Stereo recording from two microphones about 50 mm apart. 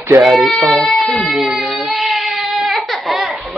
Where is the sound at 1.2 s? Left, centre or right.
Centre.